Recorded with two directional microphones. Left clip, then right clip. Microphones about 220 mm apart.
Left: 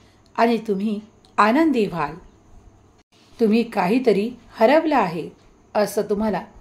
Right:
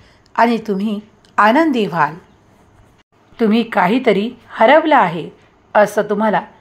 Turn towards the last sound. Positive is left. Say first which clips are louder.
# right 7 dB
turn(degrees=-10)  # may be behind; listen again after turning